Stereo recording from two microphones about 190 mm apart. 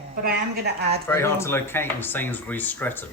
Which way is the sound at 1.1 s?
15° left (ahead or behind).